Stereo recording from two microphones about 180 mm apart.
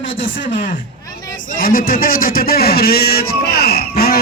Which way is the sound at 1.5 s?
55° left (ahead or behind).